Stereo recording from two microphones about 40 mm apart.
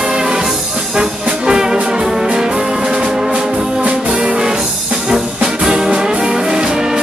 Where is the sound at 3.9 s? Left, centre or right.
Right.